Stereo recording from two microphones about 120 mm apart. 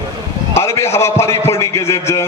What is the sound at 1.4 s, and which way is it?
Speech, 25° left (ahead or behind).